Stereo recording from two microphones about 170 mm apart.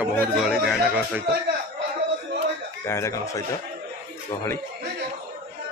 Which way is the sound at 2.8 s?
15° left (ahead or behind).